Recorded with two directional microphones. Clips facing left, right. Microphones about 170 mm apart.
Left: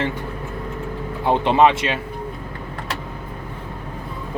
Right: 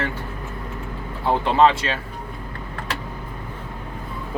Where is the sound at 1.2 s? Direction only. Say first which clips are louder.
Left 2 dB; 20° left (ahead or behind).